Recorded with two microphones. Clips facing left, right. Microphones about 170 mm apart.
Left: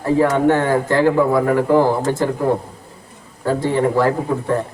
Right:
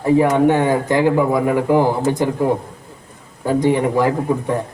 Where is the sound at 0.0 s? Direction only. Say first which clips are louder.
Right 2 dB; 15° right (ahead or behind).